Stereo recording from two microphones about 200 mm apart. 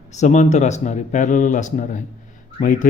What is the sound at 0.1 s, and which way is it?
Speech, 35° left (ahead or behind).